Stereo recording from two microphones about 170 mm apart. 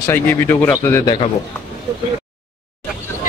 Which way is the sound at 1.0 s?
25° left (ahead or behind).